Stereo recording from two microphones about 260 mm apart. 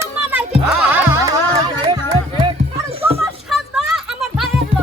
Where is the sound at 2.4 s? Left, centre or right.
Centre.